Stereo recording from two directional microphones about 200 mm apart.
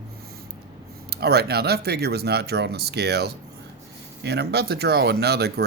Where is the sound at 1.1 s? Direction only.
55° right (ahead or behind).